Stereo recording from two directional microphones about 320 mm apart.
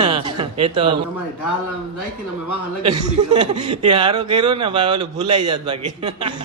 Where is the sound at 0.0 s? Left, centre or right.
Centre.